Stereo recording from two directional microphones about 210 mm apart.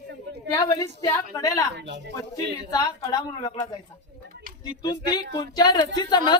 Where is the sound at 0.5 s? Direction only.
15° left (ahead or behind).